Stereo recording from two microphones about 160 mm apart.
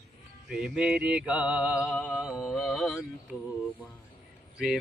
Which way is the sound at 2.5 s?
Centre (ahead or behind).